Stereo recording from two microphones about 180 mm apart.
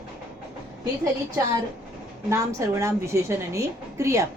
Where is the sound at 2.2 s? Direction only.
15° right (ahead or behind).